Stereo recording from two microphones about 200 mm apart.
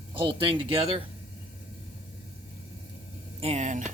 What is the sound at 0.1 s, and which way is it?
Speech, 25° right (ahead or behind).